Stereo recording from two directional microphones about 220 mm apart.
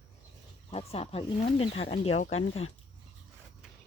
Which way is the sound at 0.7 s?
25° left (ahead or behind).